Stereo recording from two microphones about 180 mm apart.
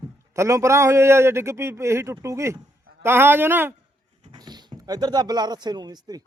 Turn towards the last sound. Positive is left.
turn(degrees=-20)  # may be behind; listen again after turning